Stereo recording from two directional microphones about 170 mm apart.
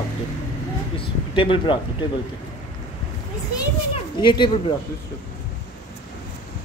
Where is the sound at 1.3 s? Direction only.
30° left (ahead or behind).